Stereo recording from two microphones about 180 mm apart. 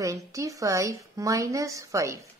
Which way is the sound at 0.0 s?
15° right (ahead or behind).